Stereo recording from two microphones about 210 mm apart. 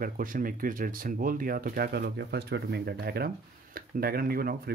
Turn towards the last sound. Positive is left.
turn(degrees=-45)  # may be behind; listen again after turning